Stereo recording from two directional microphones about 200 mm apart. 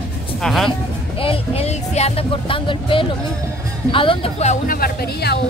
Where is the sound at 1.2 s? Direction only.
30° left (ahead or behind).